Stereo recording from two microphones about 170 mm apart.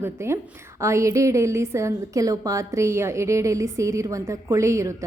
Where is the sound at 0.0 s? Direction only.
15° right (ahead or behind).